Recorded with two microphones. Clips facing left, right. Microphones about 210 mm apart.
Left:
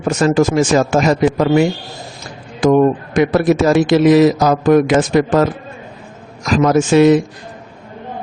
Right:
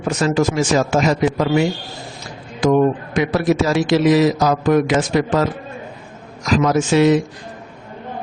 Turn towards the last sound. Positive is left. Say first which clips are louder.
# left 4 dB
turn(degrees=50)  # may be behind; listen again after turning